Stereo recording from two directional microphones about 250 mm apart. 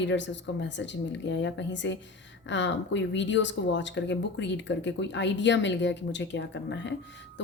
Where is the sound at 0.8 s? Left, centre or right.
Left.